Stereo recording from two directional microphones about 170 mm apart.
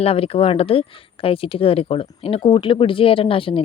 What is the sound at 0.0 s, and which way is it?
A woman's voice, 35° left (ahead or behind).